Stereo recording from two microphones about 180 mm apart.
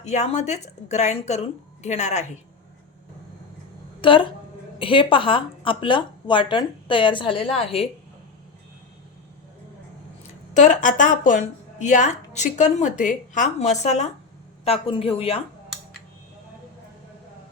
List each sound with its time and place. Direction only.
0.0 s a woman's voice: 40° left (ahead or behind)
4.0 s speech: 30° left (ahead or behind)
10.5 s a woman's voice: 45° left (ahead or behind)